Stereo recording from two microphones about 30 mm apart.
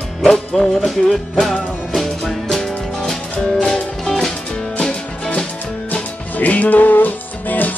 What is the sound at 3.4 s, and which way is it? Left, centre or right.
Music, left.